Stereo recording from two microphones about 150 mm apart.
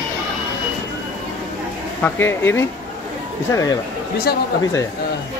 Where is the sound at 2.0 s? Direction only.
15° left (ahead or behind).